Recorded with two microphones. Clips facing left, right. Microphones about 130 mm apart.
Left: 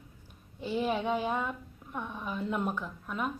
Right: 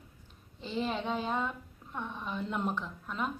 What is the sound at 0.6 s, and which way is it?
A woman's voice, 10° left (ahead or behind).